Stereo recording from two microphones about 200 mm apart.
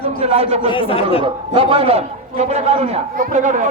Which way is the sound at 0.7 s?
25° left (ahead or behind).